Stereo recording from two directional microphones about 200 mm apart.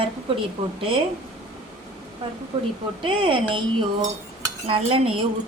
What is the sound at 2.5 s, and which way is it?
A woman's voice, 30° right (ahead or behind).